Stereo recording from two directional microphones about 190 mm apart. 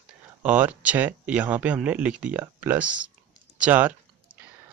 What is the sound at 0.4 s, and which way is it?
Speech, 10° right (ahead or behind).